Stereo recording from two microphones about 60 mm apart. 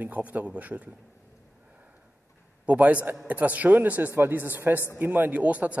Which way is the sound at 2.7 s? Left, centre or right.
Right.